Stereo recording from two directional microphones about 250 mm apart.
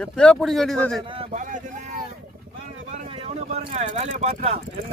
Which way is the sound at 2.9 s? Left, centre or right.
Right.